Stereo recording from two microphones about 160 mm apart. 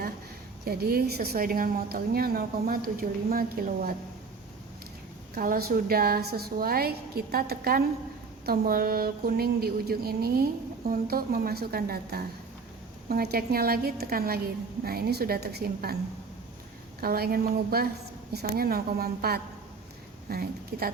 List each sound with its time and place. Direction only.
0.6 s a woman's voice: 75° right (ahead or behind)
5.3 s speech: 65° right (ahead or behind)
17.0 s speech: 75° right (ahead or behind)